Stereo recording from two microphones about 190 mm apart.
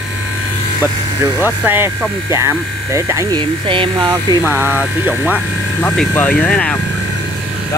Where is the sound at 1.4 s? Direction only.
10° right (ahead or behind).